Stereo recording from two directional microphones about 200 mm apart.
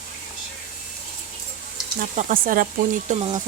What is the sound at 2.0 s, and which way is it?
Speech, 40° right (ahead or behind).